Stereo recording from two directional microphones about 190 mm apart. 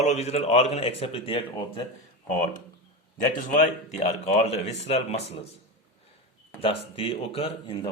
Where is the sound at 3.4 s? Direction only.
40° left (ahead or behind).